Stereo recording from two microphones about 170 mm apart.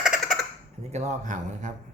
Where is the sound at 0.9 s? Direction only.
40° right (ahead or behind).